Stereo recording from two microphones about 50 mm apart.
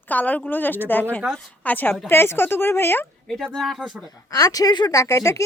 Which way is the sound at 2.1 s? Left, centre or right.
Left.